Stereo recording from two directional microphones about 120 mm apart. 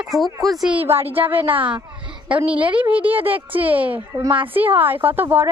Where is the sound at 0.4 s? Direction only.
Centre (ahead or behind).